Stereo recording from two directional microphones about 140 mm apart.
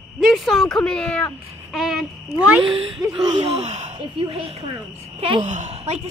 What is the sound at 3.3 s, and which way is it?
A woman's voice, 50° right (ahead or behind).